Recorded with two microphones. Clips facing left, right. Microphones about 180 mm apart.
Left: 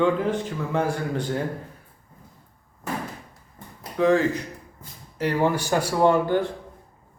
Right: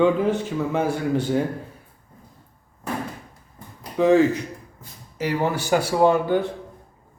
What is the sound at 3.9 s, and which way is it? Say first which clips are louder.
Speech: right 3 dB; 25° right (ahead or behind).